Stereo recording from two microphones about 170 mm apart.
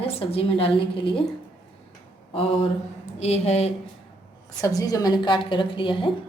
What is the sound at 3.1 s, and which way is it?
Speech, 40° left (ahead or behind).